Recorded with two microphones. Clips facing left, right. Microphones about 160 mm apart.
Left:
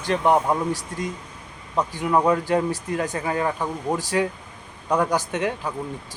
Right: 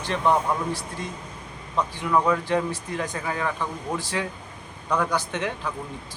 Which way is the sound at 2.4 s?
40° left (ahead or behind).